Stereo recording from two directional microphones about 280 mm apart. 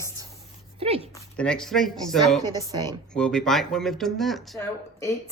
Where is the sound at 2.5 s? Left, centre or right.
Centre.